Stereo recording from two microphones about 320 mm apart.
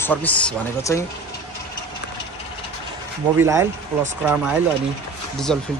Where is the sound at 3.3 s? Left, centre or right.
Centre.